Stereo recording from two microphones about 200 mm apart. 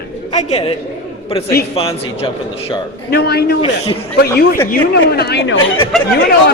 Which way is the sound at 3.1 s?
55° left (ahead or behind).